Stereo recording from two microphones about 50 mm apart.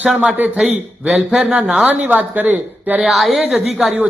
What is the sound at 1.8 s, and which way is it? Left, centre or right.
A woman's voice, right.